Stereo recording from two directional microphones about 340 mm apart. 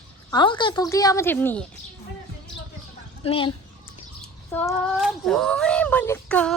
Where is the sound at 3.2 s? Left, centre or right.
Centre.